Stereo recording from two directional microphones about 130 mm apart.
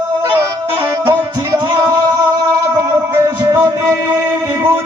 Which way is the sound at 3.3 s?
30° right (ahead or behind).